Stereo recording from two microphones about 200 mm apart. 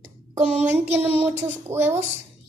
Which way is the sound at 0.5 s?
5° right (ahead or behind).